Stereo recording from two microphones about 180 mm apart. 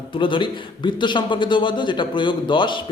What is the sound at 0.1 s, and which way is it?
A man's voice, 25° left (ahead or behind).